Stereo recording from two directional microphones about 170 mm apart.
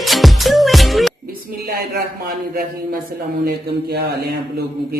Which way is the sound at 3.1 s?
60° right (ahead or behind).